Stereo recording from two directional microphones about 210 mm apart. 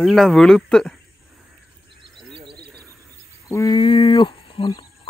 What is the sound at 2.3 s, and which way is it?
Frog, 25° right (ahead or behind).